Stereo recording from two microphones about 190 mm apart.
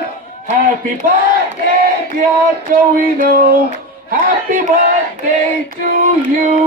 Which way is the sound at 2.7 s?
50° right (ahead or behind).